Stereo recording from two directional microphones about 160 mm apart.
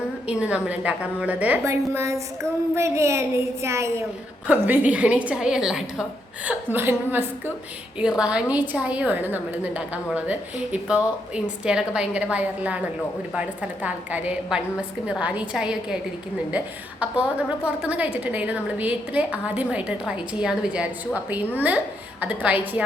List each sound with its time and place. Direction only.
0.3 s a woman's voice: 10° right (ahead or behind)